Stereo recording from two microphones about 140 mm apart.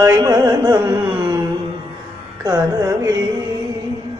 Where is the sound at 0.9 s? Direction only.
10° right (ahead or behind).